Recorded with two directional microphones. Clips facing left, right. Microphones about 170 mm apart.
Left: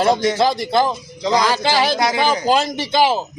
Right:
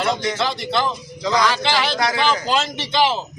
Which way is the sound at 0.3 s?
40° left (ahead or behind).